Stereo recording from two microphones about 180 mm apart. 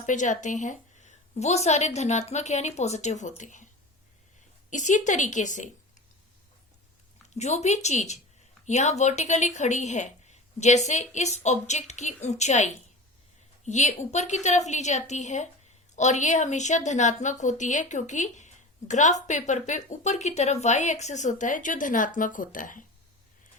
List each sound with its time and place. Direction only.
0.0 s a woman's voice: 45° left (ahead or behind)
4.7 s a woman's voice: 40° left (ahead or behind)
7.3 s a woman's voice: 40° left (ahead or behind)